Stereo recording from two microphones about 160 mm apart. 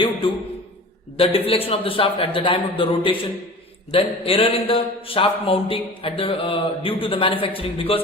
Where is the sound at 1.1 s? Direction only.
35° left (ahead or behind).